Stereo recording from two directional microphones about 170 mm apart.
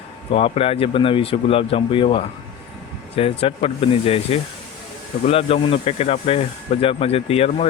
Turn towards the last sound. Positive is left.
turn(degrees=35)  # may be behind; listen again after turning